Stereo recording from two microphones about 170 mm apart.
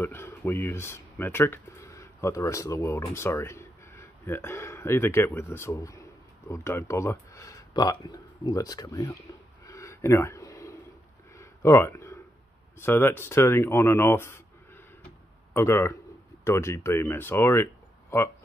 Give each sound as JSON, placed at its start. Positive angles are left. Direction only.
{"t": 0.0, "sound": "speech", "side_deg": 15}
{"t": 9.7, "sound": "a sound", "side_deg": 15}
{"t": 12.7, "sound": "speech", "side_deg": 15}
{"t": 15.5, "sound": "speech", "side_deg": 15}